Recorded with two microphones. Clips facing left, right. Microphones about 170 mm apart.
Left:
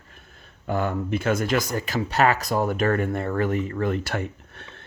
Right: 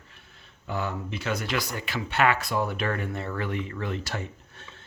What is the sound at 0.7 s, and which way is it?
Speech, 50° left (ahead or behind).